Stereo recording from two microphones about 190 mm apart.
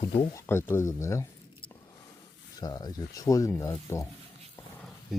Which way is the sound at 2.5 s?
20° left (ahead or behind).